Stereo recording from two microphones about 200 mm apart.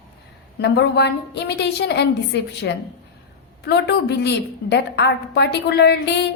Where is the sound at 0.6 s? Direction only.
55° left (ahead or behind).